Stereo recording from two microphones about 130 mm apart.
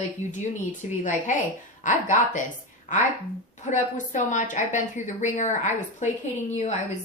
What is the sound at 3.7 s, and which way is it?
A woman's voice, 70° left (ahead or behind).